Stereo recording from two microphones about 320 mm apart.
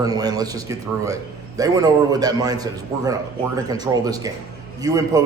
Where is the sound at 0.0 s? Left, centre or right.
Centre.